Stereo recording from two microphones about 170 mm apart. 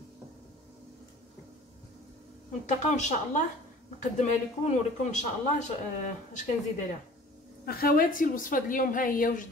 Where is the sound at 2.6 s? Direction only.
45° left (ahead or behind).